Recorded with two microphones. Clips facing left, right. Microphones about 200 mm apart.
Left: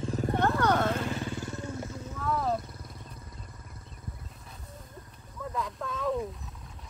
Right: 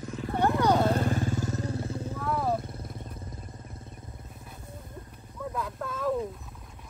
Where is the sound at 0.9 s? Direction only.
45° right (ahead or behind).